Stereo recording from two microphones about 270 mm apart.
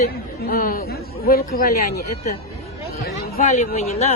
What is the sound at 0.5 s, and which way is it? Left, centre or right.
Speech, left.